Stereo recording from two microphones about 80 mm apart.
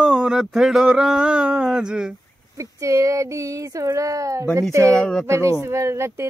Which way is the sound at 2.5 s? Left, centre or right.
Right.